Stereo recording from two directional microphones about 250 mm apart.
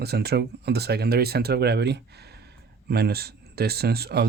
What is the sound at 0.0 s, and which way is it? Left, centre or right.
Speech, right.